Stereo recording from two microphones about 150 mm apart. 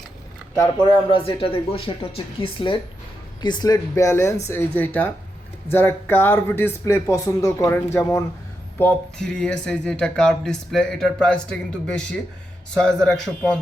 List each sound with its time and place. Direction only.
0.5 s speech: 25° left (ahead or behind)
1.2 s speech: 35° left (ahead or behind); by 13.5 s 5° left (ahead or behind)